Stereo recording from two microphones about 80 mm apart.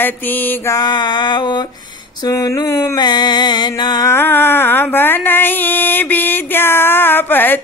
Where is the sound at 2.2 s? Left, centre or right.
Left.